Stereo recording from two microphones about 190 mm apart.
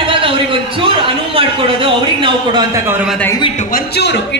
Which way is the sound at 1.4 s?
25° right (ahead or behind).